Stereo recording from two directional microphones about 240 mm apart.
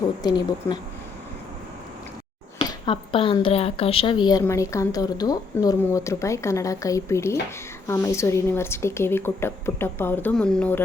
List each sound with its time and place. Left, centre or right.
0.2 s speech: centre
2.6 s speech: centre